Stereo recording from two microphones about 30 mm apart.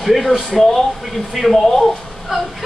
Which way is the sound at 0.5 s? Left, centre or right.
Centre.